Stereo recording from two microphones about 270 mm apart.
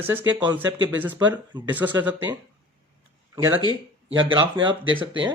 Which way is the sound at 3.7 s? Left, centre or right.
Centre.